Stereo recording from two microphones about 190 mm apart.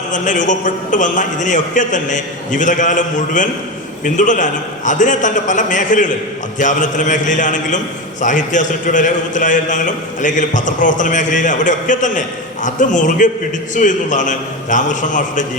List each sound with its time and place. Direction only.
0.1 s a man's voice: 40° left (ahead or behind)